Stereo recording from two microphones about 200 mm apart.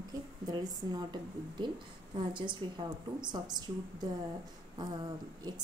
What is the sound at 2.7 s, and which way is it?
Speech, 20° right (ahead or behind).